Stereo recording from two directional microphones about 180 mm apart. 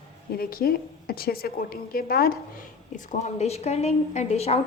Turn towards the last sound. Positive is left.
turn(degrees=35)  # may be behind; listen again after turning